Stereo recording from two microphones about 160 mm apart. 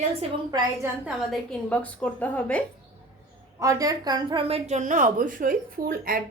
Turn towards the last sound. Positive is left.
turn(degrees=-65)  # may be behind; listen again after turning